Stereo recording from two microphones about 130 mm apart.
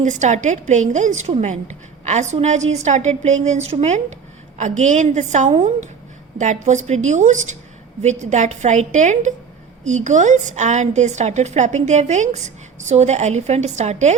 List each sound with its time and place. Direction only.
0.0 s a woman's voice: 65° right (ahead or behind)
6.4 s a woman's voice: 65° right (ahead or behind)